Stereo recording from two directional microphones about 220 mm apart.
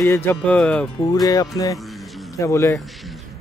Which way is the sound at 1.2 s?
15° left (ahead or behind).